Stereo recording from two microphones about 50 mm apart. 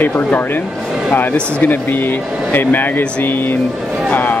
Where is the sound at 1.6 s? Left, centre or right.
Left.